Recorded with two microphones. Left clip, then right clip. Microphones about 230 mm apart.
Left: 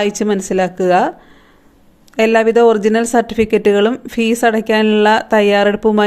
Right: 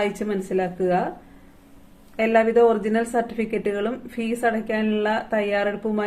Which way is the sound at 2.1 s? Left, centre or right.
Left.